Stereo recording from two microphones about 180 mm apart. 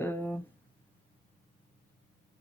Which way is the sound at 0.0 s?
10° left (ahead or behind).